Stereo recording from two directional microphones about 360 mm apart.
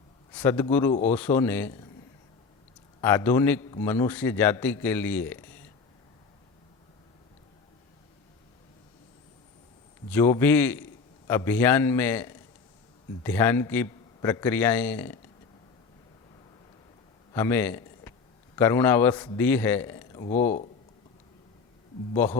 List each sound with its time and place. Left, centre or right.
0.3 s a man's voice: centre
3.0 s a man's voice: centre
10.1 s a man's voice: centre
17.3 s a man's voice: centre
20.4 s speech: centre
22.1 s a man's voice: centre